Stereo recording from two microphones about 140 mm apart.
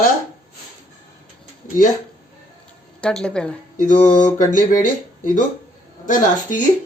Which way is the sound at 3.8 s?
65° left (ahead or behind).